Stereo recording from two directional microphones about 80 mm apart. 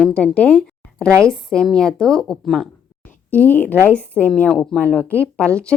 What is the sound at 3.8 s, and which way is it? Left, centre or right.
A woman's voice, centre.